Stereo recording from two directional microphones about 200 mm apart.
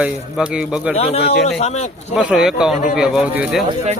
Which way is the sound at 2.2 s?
5° right (ahead or behind).